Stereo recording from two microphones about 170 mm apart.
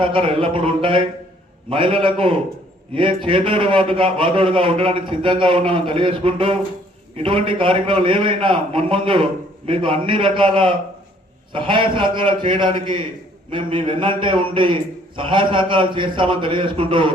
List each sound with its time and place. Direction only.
0.0 s a man's voice: 30° right (ahead or behind)